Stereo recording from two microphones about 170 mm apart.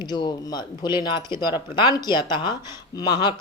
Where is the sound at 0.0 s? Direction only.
25° left (ahead or behind).